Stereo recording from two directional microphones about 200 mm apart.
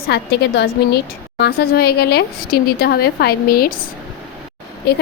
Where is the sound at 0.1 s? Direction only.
55° left (ahead or behind).